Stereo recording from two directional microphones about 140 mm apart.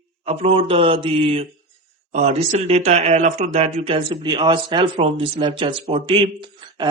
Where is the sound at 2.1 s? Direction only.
55° right (ahead or behind).